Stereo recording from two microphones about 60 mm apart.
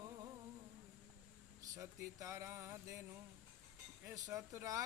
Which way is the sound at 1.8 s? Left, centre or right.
Right.